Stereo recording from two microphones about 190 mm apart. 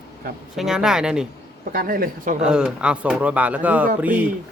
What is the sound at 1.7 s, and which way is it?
Speech, 50° right (ahead or behind).